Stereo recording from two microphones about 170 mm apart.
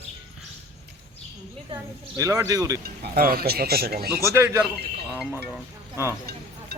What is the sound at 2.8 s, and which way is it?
Speech, 60° right (ahead or behind).